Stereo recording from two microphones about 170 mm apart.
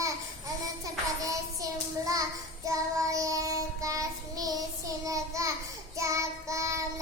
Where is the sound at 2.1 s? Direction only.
20° right (ahead or behind).